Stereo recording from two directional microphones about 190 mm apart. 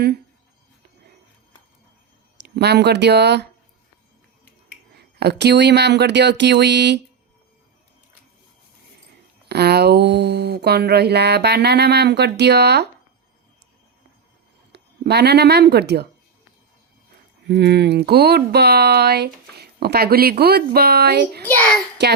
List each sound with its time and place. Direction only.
2.4 s speech: 60° right (ahead or behind)
4.9 s speech: 60° right (ahead or behind)
9.5 s speech: 60° right (ahead or behind)
14.7 s speech: 60° right (ahead or behind)
17.5 s speech: 60° right (ahead or behind)
21.4 s a child's voice: 10° left (ahead or behind)
22.0 s speech: 65° right (ahead or behind)